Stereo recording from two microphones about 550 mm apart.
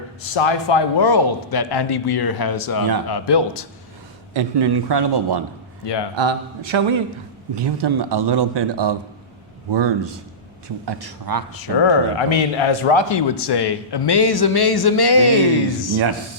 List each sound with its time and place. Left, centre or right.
0.3 s a man's voice: left
4.4 s speech: right
5.8 s speech: left
6.1 s a man's voice: right
11.5 s speech: left